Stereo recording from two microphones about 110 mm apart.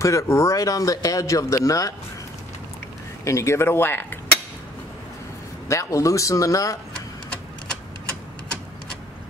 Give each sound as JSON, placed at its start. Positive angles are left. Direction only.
{"t": 0.0, "sound": "speech", "side_deg": 25}
{"t": 3.3, "sound": "speech", "side_deg": 25}
{"t": 5.7, "sound": "speech", "side_deg": 30}